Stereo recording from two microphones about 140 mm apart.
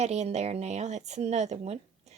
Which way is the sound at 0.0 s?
50° right (ahead or behind).